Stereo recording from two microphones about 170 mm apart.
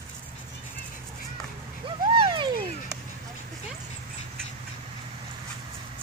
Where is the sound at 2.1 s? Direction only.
30° right (ahead or behind).